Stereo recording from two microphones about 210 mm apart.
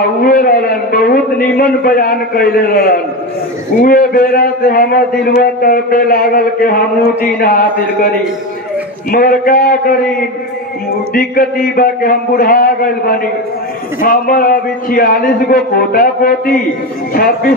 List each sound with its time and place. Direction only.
0.2 s a sound: 40° left (ahead or behind)
3.8 s a man's voice: 45° left (ahead or behind)
9.1 s a man's voice: 40° left (ahead or behind)
11.1 s a man's voice: 40° left (ahead or behind)